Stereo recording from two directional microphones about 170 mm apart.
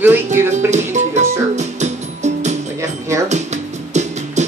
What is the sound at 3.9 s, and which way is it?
Music, 40° right (ahead or behind).